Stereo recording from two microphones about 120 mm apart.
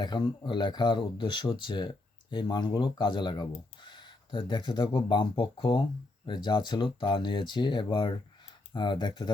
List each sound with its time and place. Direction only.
0.0 s speech: 40° left (ahead or behind)